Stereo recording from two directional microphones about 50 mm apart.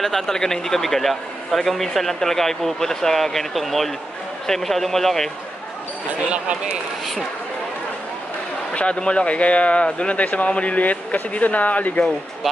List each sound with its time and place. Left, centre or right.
0.0 s speech: centre
6.2 s speech: right
8.7 s speech: left